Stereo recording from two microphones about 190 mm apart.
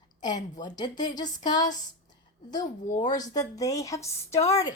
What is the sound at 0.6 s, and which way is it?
A woman's voice, 20° left (ahead or behind).